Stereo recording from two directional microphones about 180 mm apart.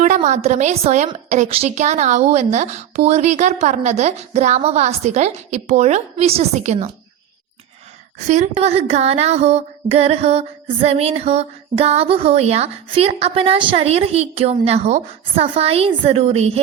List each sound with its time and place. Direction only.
0.0 s speech: 40° right (ahead or behind)
8.3 s speech: 40° right (ahead or behind)